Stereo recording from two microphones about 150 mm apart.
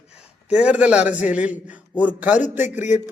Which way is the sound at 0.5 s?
10° right (ahead or behind).